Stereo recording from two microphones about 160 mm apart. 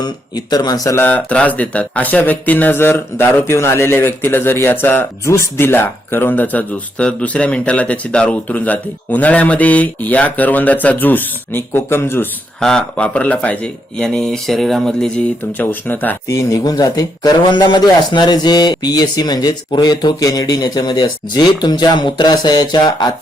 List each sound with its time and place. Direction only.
0.0 s speech: 25° left (ahead or behind)
16.5 s speech: 25° left (ahead or behind)